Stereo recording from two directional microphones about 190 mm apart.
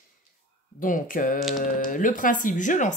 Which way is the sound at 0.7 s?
45° left (ahead or behind).